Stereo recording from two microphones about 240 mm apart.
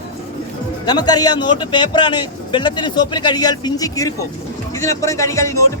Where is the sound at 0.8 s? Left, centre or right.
Centre.